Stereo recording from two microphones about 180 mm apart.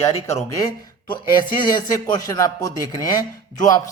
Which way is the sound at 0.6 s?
25° left (ahead or behind).